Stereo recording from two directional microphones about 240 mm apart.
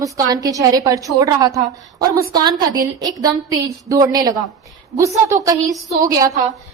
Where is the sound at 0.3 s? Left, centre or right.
Centre.